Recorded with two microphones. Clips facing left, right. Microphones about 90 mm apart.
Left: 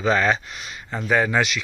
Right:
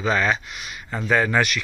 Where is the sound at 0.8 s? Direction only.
15° left (ahead or behind).